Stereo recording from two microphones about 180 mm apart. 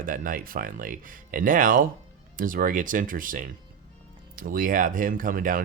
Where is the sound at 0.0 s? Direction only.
50° right (ahead or behind).